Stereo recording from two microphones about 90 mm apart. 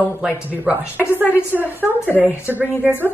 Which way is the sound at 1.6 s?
20° right (ahead or behind).